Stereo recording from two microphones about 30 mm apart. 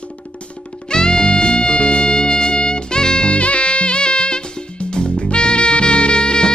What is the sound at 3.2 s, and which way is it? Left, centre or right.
Music, left.